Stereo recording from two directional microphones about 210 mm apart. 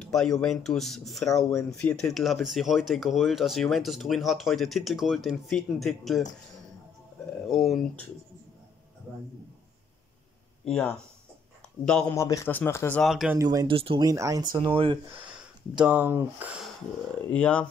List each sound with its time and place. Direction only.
0.0 s speech: centre (ahead or behind)
7.4 s speech: centre (ahead or behind)
10.6 s speech: 5° left (ahead or behind)
12.2 s a man's voice: 15° left (ahead or behind); by 13.4 s centre (ahead or behind)
13.4 s speech: 15° right (ahead or behind)
15.8 s speech: 10° right (ahead or behind)
17.3 s a man's voice: 5° left (ahead or behind)